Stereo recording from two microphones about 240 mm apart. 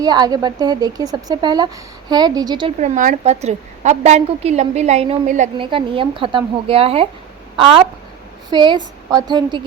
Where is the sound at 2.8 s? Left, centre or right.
Right.